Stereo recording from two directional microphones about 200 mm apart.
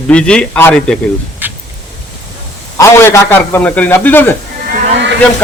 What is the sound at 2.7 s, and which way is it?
A man's voice, 15° left (ahead or behind).